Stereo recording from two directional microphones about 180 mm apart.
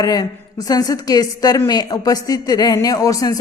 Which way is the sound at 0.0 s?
20° left (ahead or behind).